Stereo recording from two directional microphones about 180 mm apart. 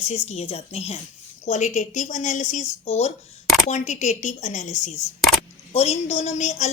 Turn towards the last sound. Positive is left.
turn(degrees=40)  # may be behind; listen again after turning